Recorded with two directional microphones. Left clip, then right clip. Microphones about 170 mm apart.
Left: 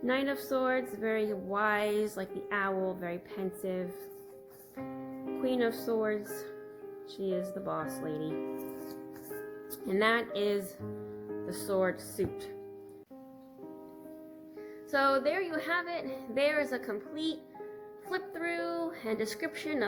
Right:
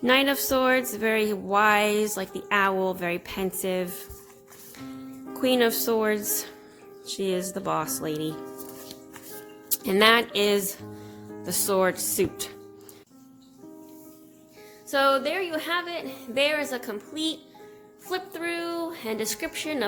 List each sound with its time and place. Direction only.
0.0 s speech: 45° right (ahead or behind)
5.4 s speech: 45° right (ahead or behind)
9.8 s speech: 45° right (ahead or behind)
14.8 s a woman's voice: 20° right (ahead or behind)